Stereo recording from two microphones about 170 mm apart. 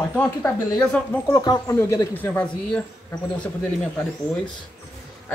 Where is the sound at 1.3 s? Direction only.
20° left (ahead or behind).